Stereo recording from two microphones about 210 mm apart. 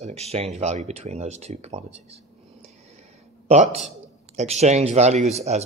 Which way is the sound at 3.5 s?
30° right (ahead or behind).